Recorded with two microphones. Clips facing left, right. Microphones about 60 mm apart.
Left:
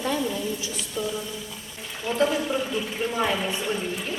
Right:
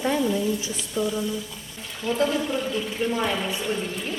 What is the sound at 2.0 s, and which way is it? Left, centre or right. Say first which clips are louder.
Speech: even; centre.